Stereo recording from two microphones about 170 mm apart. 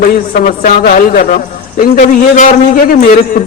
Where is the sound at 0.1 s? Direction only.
55° left (ahead or behind).